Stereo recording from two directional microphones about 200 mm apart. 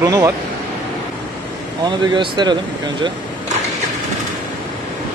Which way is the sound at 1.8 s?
20° right (ahead or behind).